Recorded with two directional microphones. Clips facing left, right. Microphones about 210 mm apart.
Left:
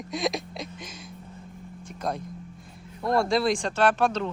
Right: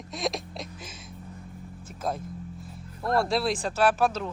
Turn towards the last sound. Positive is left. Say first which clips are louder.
# left 1 dB
turn(degrees=-5)  # may be behind; listen again after turning